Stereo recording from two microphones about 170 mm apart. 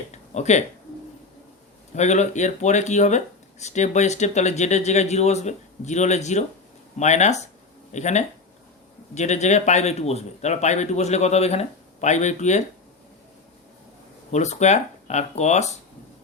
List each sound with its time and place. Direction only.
0.1 s a sound: 40° left (ahead or behind)
2.0 s speech: 45° left (ahead or behind)
14.3 s speech: 40° left (ahead or behind)